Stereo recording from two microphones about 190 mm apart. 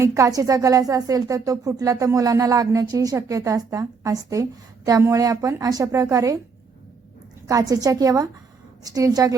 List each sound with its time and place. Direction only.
0.0 s speech: 15° right (ahead or behind)
7.4 s a woman's voice: 20° right (ahead or behind)